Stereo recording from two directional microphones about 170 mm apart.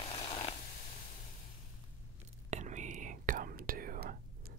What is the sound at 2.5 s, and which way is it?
Whispering, 45° right (ahead or behind).